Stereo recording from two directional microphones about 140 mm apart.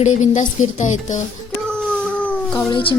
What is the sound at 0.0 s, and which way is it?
Speech, 60° left (ahead or behind).